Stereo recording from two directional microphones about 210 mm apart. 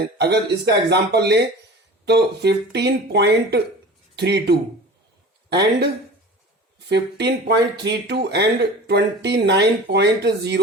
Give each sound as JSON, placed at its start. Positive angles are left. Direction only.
{"t": 0.0, "sound": "speech", "side_deg": -50}